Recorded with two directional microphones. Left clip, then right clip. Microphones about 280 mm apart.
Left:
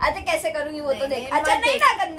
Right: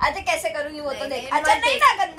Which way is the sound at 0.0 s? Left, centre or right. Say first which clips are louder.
Even; centre.